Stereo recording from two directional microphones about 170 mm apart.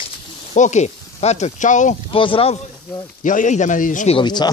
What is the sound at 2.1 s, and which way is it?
Speech, 30° left (ahead or behind).